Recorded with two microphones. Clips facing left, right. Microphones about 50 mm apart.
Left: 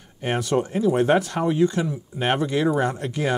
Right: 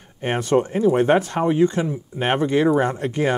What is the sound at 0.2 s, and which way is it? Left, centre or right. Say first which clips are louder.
Speech: right 3 dB; right.